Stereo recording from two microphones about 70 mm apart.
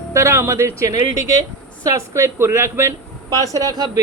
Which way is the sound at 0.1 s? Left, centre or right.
Right.